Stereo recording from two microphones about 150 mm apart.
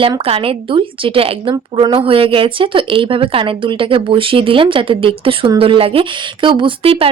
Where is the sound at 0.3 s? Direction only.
35° right (ahead or behind).